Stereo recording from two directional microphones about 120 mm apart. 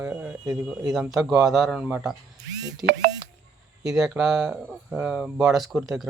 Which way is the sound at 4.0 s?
5° right (ahead or behind).